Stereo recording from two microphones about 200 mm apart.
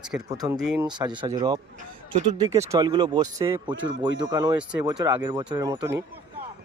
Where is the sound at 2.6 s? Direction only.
20° right (ahead or behind).